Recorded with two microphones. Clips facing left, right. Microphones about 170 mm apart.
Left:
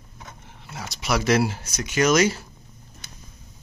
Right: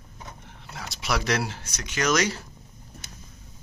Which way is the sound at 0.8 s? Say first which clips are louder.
Left 3 dB; centre (ahead or behind).